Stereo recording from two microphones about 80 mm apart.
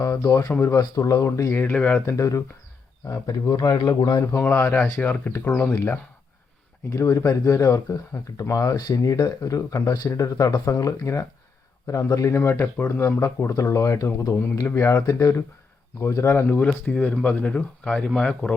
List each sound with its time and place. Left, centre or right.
0.0 s speech: left
1.5 s speech: left
2.0 s speech: left
4.4 s speech: left
5.7 s speech: left
14.5 s speech: left; by 18.5 s centre